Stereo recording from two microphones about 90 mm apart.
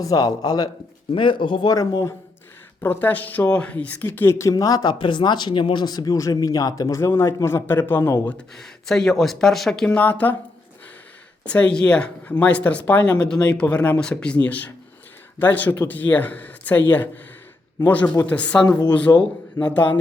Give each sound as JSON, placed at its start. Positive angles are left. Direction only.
{"t": 0.0, "sound": "speech", "side_deg": 40}
{"t": 1.1, "sound": "speech", "side_deg": 65}
{"t": 1.7, "sound": "speech", "side_deg": 40}
{"t": 2.8, "sound": "speech", "side_deg": 20}
{"t": 4.9, "sound": "speech", "side_deg": 60}
{"t": 8.4, "sound": "speech", "side_deg": 5}
{"t": 11.4, "sound": "speech", "side_deg": 15}